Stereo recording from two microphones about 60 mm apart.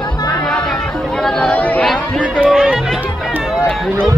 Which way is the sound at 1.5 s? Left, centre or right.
Left.